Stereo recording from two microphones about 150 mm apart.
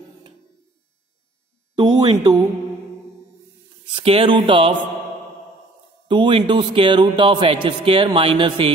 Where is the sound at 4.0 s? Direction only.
35° right (ahead or behind).